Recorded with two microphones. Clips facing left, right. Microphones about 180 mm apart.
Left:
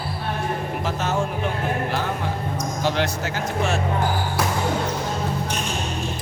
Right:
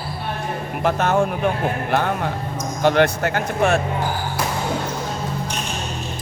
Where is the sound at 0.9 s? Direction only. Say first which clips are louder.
Right 8 dB; 60° right (ahead or behind).